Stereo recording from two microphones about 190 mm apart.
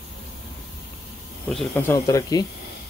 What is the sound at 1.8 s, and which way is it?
Speech, 15° left (ahead or behind).